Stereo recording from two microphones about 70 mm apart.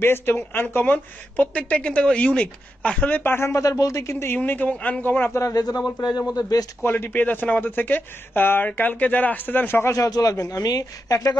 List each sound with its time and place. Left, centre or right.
0.0 s a woman's voice: left
3.3 s speech: left
4.5 s a woman's voice: left
5.5 s a man's voice: left
6.9 s a woman's voice: left
9.9 s speech: left